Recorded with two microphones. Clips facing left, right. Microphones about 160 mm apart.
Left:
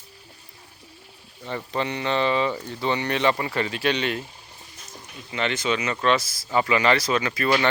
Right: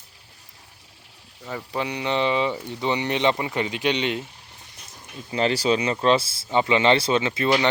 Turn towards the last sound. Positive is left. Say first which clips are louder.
# right 1 dB
turn(degrees=-20)  # may be behind; listen again after turning